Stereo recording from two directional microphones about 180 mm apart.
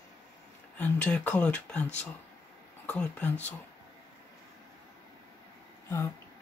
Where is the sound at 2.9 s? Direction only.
10° left (ahead or behind).